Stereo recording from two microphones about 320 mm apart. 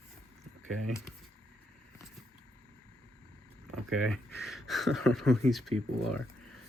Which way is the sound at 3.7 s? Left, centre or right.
Centre.